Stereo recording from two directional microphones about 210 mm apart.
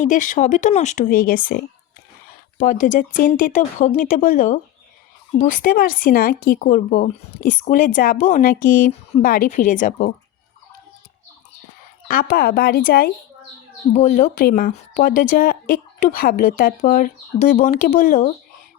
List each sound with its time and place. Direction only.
0.0 s speech: 40° left (ahead or behind)
2.6 s speech: 40° left (ahead or behind)
12.0 s speech: 45° left (ahead or behind)
13.9 s speech: 35° left (ahead or behind)